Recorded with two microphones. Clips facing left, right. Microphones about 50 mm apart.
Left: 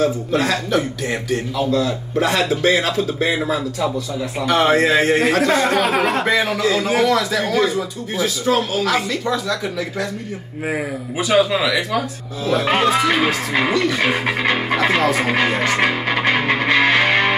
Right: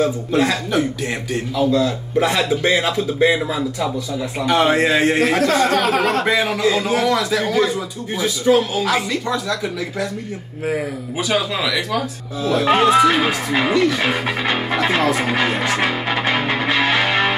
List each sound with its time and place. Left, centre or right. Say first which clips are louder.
0.3 s a man's voice: even; centre
2.2 s speech: left 2 dB; centre
4.4 s a man's voice: even; centre
5.4 s speech: even; centre
6.2 s a man's voice: even; centre
11.1 s a man's voice: left 4 dB; centre
16.4 s music: left 2 dB; left